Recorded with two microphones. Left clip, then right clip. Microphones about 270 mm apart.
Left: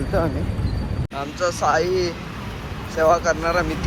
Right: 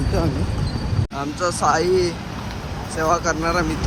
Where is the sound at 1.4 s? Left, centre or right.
Centre.